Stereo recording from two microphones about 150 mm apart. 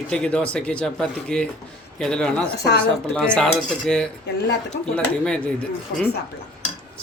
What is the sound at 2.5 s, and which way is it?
Speech, 90° left.